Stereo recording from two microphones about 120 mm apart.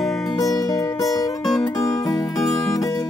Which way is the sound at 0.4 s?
30° left (ahead or behind).